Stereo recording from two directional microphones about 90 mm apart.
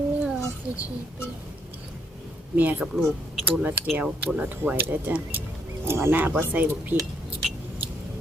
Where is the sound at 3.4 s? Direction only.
20° right (ahead or behind).